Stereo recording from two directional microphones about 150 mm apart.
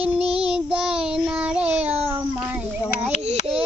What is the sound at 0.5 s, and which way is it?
Child singing, 5° right (ahead or behind).